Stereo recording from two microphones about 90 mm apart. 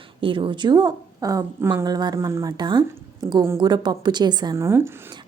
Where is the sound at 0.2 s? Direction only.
75° right (ahead or behind); by 4.5 s 50° right (ahead or behind).